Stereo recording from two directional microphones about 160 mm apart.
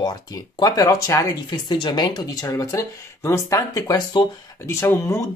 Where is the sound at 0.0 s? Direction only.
25° left (ahead or behind).